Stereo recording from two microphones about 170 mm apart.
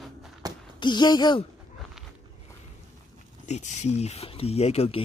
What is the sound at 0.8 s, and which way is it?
Speech, 25° left (ahead or behind).